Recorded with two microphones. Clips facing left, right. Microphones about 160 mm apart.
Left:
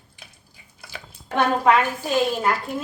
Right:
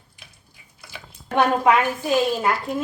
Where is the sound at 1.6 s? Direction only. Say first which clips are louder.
Even; 10° right (ahead or behind).